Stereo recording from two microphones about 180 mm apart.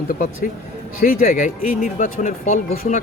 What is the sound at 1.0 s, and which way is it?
Speech, 45° left (ahead or behind).